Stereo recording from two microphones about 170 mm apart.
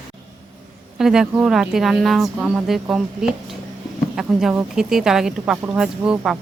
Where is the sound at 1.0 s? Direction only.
Centre (ahead or behind).